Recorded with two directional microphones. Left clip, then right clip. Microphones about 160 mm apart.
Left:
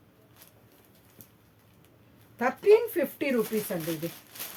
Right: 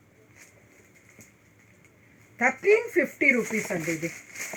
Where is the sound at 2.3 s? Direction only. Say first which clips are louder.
Even; 15° left (ahead or behind).